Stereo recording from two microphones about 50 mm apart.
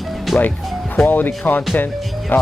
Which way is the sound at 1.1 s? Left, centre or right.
Left.